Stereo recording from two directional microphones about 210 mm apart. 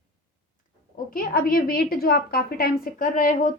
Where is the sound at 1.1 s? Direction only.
45° left (ahead or behind).